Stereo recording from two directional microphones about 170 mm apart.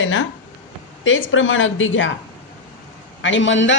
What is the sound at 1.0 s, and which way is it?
Speech, 90° left.